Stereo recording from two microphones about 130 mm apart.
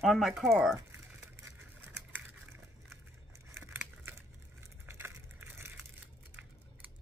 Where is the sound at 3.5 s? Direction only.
15° right (ahead or behind).